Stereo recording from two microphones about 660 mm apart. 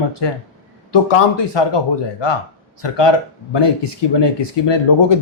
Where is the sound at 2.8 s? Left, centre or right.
Left.